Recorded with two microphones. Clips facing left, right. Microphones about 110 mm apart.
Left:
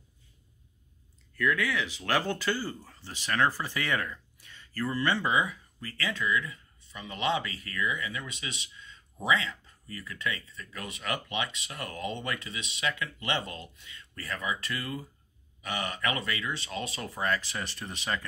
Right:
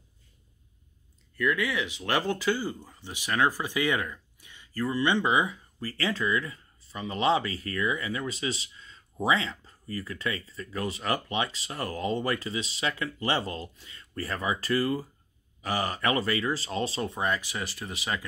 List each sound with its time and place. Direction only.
1.3 s speech: 5° right (ahead or behind)